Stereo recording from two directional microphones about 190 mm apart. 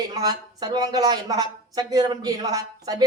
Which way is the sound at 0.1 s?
20° right (ahead or behind).